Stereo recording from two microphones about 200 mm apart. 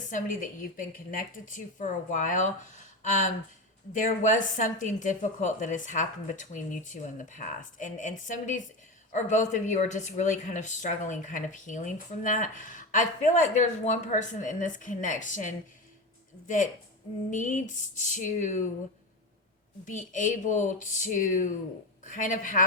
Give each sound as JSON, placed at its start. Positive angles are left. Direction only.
{"t": 0.0, "sound": "speech", "side_deg": 40}
{"t": 17.3, "sound": "speech", "side_deg": 40}
{"t": 19.8, "sound": "speech", "side_deg": 40}